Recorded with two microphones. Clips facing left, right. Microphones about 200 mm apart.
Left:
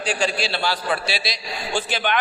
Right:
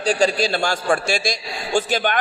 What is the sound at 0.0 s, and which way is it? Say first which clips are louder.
A man's voice: right 5 dB; 40° right (ahead or behind).